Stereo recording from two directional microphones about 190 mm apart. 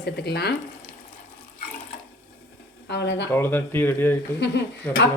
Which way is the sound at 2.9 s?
65° left (ahead or behind).